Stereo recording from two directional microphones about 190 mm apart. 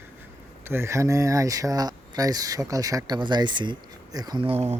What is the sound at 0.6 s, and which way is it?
Speech, 10° right (ahead or behind).